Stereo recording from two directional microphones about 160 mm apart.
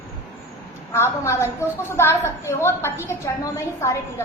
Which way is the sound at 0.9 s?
15° left (ahead or behind).